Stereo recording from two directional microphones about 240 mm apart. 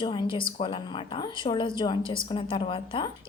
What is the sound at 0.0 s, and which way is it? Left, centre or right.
A woman's voice, centre.